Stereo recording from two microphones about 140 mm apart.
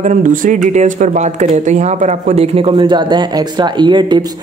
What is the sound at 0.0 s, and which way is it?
Speech, 65° right (ahead or behind).